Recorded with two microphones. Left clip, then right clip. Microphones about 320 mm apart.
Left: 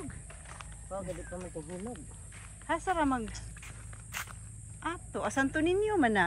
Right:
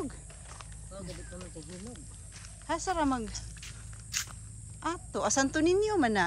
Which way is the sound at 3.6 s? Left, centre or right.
Centre.